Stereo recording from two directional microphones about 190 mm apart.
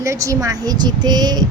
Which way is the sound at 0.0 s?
15° right (ahead or behind).